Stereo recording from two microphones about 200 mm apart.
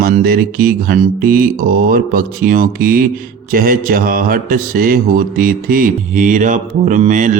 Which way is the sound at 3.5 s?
45° right (ahead or behind).